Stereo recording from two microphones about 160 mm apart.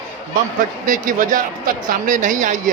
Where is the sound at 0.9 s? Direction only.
55° right (ahead or behind).